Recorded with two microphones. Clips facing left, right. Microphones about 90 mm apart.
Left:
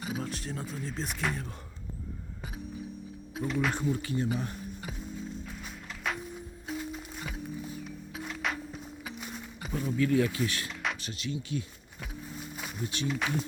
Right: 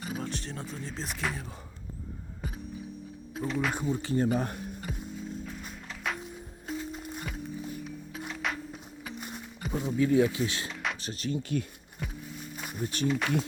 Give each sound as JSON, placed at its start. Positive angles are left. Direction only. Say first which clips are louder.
{"t": 0.0, "sound": "speech", "louder": "even", "side_deg": 5}
{"t": 3.3, "sound": "speech", "louder": "even", "side_deg": 5}
{"t": 3.8, "sound": "speech", "louder": "even", "side_deg": -15}
{"t": 4.0, "sound": "speech", "louder": "right 4 dB", "side_deg": -35}
{"t": 4.4, "sound": "speech", "louder": "right 5 dB", "side_deg": -50}
{"t": 6.0, "sound": "music", "louder": "left 1 dB", "side_deg": 0}
{"t": 9.7, "sound": "speech", "louder": "right 2 dB", "side_deg": -20}
{"t": 11.0, "sound": "speech", "louder": "right 3 dB", "side_deg": -40}
{"t": 12.5, "sound": "music", "louder": "right 3 dB", "side_deg": 0}
{"t": 12.8, "sound": "speech", "louder": "right 4 dB", "side_deg": -40}
{"t": 13.1, "sound": "speech", "louder": "right 3 dB", "side_deg": 0}